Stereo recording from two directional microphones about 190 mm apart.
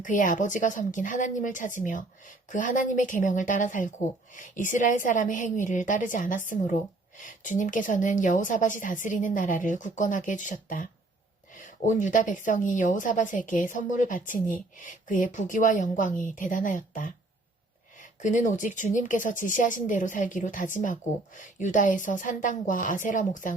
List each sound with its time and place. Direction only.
0.0 s speech: 45° left (ahead or behind)
11.9 s speech: 40° left (ahead or behind)
18.2 s speech: 40° left (ahead or behind)